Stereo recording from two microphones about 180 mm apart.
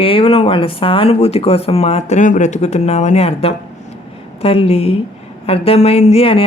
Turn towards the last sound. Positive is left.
turn(degrees=35)  # may be behind; listen again after turning